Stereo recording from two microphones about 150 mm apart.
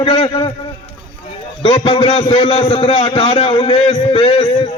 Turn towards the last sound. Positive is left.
turn(degrees=40)  # may be behind; listen again after turning